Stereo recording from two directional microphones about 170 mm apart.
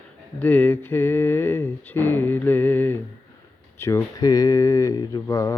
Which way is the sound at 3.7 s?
15° left (ahead or behind).